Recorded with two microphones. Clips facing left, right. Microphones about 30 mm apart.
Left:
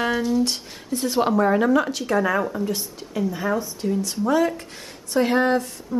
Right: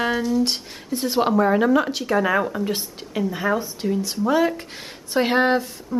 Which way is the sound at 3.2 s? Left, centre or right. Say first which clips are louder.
Right 1 dB; centre.